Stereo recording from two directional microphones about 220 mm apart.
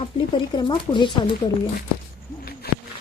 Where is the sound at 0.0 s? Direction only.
20° left (ahead or behind).